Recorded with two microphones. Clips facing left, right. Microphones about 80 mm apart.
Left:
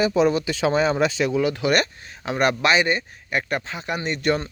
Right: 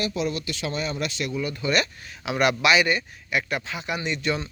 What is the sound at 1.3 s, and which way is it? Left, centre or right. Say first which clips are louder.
Speech: left 7 dB; left.